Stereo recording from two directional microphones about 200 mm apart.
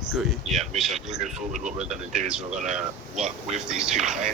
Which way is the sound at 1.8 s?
5° right (ahead or behind).